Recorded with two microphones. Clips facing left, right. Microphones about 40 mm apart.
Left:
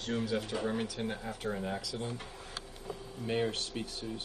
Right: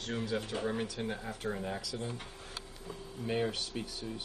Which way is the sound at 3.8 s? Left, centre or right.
Left.